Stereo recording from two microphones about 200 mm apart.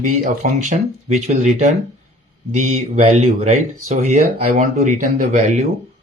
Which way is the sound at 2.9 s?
30° right (ahead or behind).